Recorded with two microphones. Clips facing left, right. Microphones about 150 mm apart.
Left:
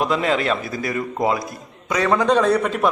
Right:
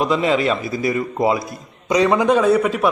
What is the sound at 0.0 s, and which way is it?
A man's voice, centre (ahead or behind).